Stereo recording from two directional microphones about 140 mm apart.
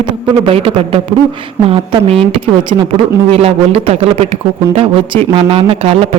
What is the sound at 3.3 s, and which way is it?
A woman's voice, 45° right (ahead or behind).